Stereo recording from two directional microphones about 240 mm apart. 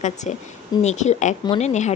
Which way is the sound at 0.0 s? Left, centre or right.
Left.